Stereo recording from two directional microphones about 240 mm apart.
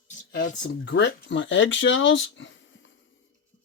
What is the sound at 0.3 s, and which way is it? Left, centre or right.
Speech, left.